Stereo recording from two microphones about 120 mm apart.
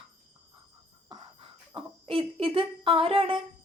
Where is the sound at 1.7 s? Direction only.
50° right (ahead or behind).